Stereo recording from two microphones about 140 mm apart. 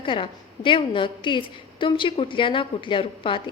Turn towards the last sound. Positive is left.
turn(degrees=35)  # may be behind; listen again after turning